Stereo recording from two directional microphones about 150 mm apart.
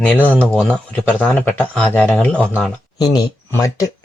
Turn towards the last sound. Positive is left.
turn(degrees=20)  # may be behind; listen again after turning